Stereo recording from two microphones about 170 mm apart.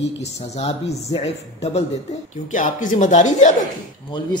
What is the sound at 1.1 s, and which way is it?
Speech, 35° left (ahead or behind).